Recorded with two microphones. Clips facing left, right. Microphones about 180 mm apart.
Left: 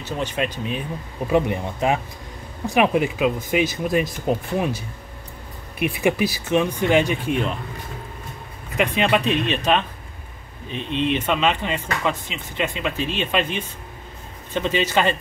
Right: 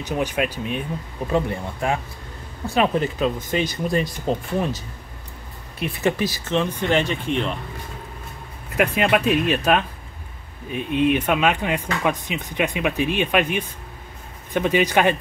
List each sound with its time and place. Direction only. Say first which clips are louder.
0.0 s speech: right 2 dB; 15° right (ahead or behind)
1.3 s speech: left 3 dB; 20° left (ahead or behind)
8.7 s speech: right 1 dB; 5° right (ahead or behind)